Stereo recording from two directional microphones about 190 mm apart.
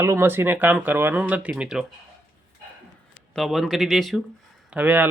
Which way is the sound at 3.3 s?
Centre (ahead or behind).